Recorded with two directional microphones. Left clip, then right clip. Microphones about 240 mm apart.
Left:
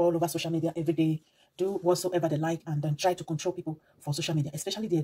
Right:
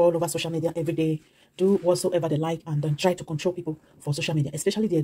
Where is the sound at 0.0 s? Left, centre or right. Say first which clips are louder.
Right 5 dB; right.